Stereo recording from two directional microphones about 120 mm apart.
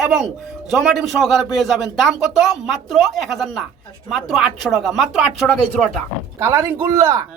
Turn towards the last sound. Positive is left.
turn(degrees=-30)  # may be behind; listen again after turning